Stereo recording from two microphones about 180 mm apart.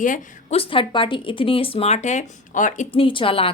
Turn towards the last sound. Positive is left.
turn(degrees=30)  # may be behind; listen again after turning